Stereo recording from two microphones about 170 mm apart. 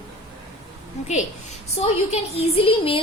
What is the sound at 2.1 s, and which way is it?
Speech, 35° left (ahead or behind).